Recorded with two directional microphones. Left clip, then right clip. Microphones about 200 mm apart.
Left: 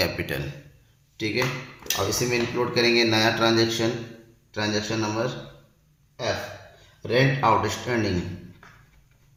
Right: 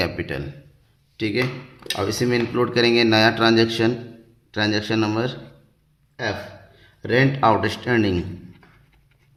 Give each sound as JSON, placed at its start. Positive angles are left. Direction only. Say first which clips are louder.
{"t": 0.0, "sound": "a man's voice", "louder": "right 1 dB", "side_deg": -30}
{"t": 1.1, "sound": "speech", "louder": "right 2 dB", "side_deg": -45}
{"t": 7.0, "sound": "speech", "louder": "right 3 dB", "side_deg": -50}